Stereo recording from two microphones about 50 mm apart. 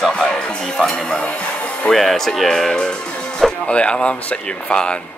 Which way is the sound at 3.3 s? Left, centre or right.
Centre.